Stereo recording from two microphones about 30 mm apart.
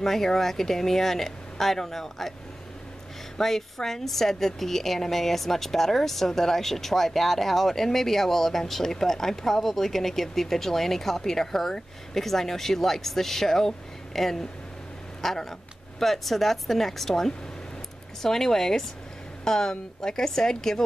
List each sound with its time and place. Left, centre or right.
0.0 s a woman's voice: centre
3.3 s a woman's voice: centre